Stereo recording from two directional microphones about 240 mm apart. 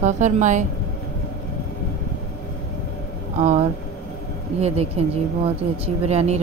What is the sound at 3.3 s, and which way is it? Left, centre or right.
A woman's voice, right.